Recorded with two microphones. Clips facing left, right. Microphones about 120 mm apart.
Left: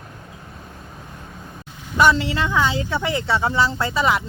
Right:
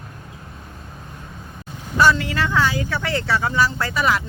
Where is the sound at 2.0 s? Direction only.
20° left (ahead or behind).